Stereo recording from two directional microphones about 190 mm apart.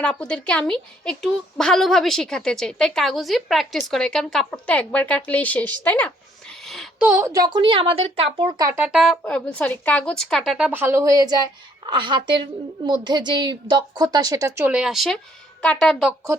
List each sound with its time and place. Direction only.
0.0 s a woman's voice: 5° left (ahead or behind); by 8.8 s 20° right (ahead or behind)
8.8 s a woman's voice: 5° right (ahead or behind)